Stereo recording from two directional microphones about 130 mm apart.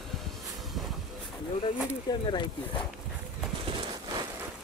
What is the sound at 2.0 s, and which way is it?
Speech, 40° left (ahead or behind).